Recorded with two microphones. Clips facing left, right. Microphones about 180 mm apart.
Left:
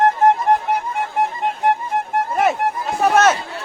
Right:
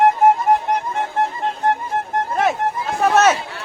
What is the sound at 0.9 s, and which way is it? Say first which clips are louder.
Music: even; 10° left (ahead or behind).